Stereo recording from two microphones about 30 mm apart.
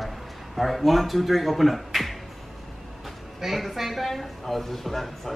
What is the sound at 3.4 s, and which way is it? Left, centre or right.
Speech, centre.